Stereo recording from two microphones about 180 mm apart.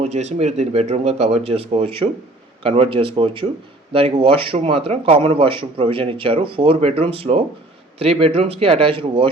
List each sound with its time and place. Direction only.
0.0 s speech: 35° right (ahead or behind)